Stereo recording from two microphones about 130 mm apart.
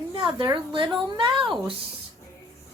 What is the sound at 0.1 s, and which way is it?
A woman's voice, 40° right (ahead or behind).